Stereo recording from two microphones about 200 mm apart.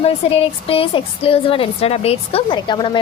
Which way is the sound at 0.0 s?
30° left (ahead or behind).